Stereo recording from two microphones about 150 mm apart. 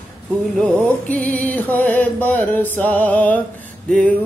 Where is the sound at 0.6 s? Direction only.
10° left (ahead or behind).